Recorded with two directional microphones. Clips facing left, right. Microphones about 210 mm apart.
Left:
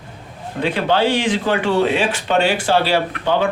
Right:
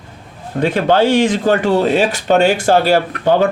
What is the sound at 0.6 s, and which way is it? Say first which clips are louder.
Speech: right 4 dB; 45° right (ahead or behind).